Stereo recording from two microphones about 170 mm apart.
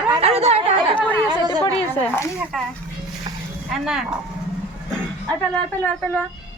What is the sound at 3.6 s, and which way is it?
Speech, 5° right (ahead or behind).